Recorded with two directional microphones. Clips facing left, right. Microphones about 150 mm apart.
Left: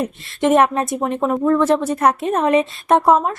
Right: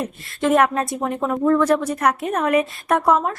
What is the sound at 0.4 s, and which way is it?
A woman's voice, 25° left (ahead or behind).